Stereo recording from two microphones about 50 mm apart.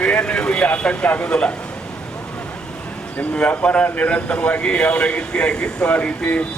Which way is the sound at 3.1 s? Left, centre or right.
Left.